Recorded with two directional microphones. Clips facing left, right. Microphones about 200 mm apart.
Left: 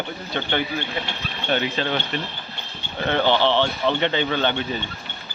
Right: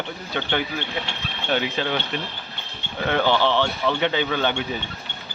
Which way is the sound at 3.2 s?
20° left (ahead or behind).